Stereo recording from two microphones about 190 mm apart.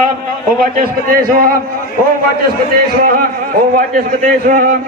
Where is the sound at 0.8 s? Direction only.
50° right (ahead or behind).